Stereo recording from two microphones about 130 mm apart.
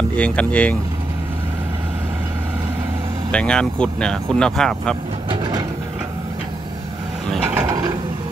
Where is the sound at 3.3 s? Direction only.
10° left (ahead or behind).